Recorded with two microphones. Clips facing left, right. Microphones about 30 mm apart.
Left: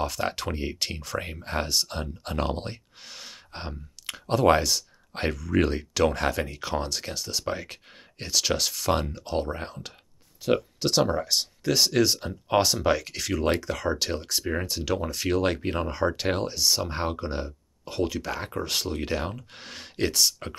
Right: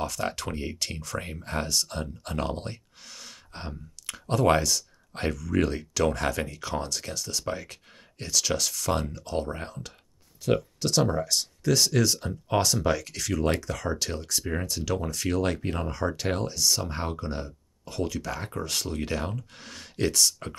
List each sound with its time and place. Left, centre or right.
0.0 s speech: left